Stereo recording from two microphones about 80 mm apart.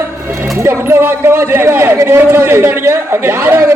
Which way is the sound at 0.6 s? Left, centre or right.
Right.